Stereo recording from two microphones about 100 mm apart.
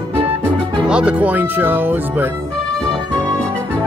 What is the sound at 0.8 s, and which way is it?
Music, 10° right (ahead or behind).